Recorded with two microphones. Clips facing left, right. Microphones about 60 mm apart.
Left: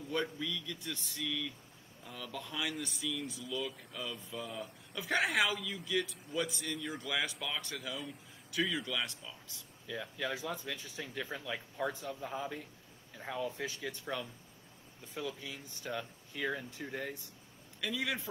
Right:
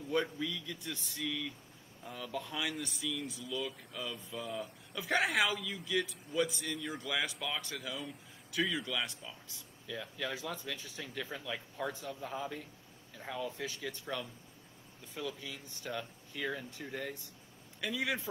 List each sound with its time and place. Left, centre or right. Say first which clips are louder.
0.1 s a man's voice: right 2 dB; centre
3.0 s speech: even; centre
5.1 s a man's voice: even; centre
5.6 s speech: even; centre
9.0 s a man's voice: even; centre
9.8 s speech: left 1 dB; centre
17.7 s a man's voice: right 1 dB; centre